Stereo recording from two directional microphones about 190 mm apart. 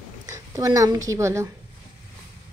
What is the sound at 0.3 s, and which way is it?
A woman's voice, 20° right (ahead or behind).